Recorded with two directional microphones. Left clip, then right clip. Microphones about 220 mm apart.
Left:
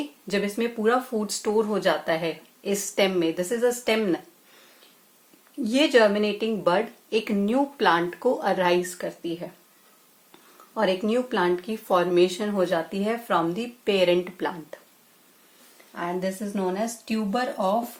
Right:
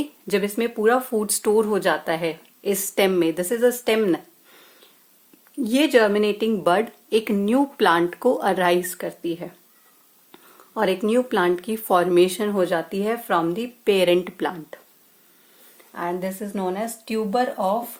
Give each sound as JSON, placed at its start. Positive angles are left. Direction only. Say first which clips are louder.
{"t": 0.3, "sound": "speech", "louder": "right 3 dB", "side_deg": -40}
{"t": 5.6, "sound": "speech", "louder": "right 1 dB", "side_deg": -35}
{"t": 10.8, "sound": "speech", "louder": "right 3 dB", "side_deg": -40}
{"t": 16.0, "sound": "speech", "louder": "right 2 dB", "side_deg": -35}